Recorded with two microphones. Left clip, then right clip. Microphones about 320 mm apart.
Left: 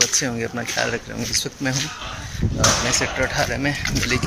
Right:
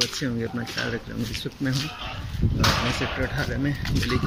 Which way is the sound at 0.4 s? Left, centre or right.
Centre.